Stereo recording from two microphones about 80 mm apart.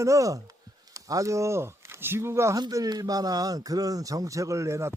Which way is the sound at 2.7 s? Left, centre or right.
Right.